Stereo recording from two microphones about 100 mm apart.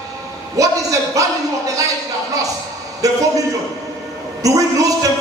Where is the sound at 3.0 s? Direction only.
35° right (ahead or behind).